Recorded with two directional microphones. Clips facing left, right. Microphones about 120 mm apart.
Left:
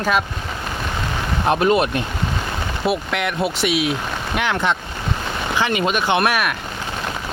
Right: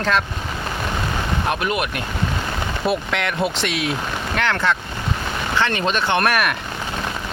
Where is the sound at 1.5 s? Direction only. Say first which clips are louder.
Left 9 dB; 30° left (ahead or behind).